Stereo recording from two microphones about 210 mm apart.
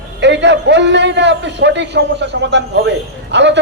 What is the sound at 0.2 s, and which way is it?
A man's voice, 55° right (ahead or behind).